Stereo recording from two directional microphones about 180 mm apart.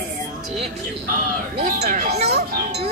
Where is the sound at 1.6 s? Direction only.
50° right (ahead or behind).